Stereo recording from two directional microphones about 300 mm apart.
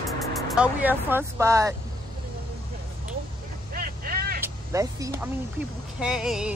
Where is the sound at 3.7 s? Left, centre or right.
Right.